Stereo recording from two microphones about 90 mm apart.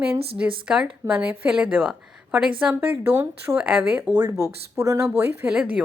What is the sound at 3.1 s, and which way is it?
Speech, 30° right (ahead or behind).